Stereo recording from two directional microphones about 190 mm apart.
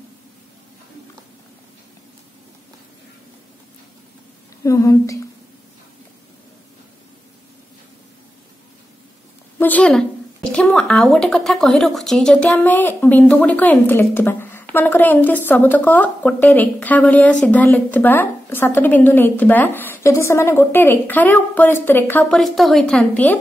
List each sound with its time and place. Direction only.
4.6 s a woman's voice: 15° left (ahead or behind)
9.6 s a woman's voice: 10° left (ahead or behind)
22.2 s speech: centre (ahead or behind)